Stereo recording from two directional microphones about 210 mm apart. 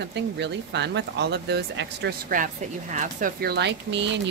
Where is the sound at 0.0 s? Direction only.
55° right (ahead or behind).